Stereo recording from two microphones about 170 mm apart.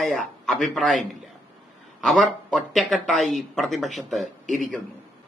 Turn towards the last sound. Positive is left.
turn(degrees=-45)  # may be behind; listen again after turning